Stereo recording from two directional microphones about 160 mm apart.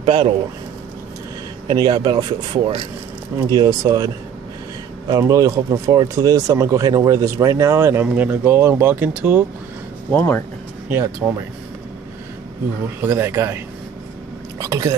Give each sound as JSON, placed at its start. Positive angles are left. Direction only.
{"t": 0.0, "sound": "speech", "side_deg": -35}
{"t": 1.7, "sound": "speech", "side_deg": -30}
{"t": 5.2, "sound": "speech", "side_deg": -20}
{"t": 10.1, "sound": "speech", "side_deg": 10}
{"t": 10.9, "sound": "speech", "side_deg": -10}
{"t": 13.0, "sound": "speech", "side_deg": -15}
{"t": 14.6, "sound": "speech", "side_deg": -20}